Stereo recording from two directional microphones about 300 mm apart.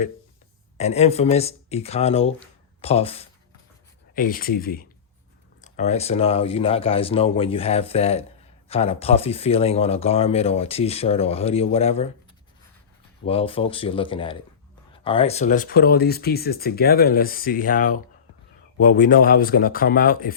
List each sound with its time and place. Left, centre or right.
0.8 s speech: left
13.2 s speech: centre